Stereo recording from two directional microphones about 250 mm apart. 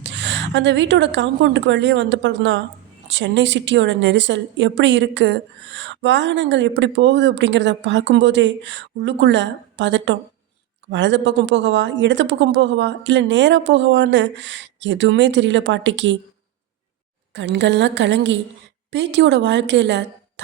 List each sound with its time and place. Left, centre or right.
0.0 s a woman's voice: right
17.3 s a woman's voice: right